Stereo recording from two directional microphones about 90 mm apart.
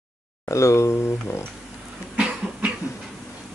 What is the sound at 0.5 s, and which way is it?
Speech, 35° left (ahead or behind).